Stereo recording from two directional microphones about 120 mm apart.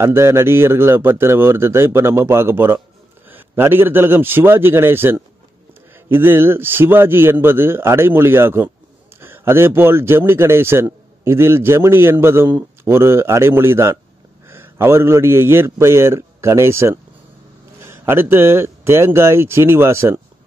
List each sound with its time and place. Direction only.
0.0 s a man's voice: 20° right (ahead or behind)